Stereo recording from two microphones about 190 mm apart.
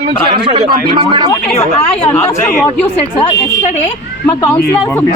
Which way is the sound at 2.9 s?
35° left (ahead or behind).